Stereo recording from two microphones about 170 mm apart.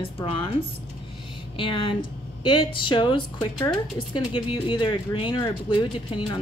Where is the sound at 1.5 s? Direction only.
30° left (ahead or behind).